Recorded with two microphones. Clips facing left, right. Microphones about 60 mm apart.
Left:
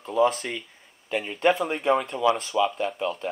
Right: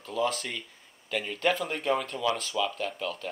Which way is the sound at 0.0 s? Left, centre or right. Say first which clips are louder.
Left 8 dB; left.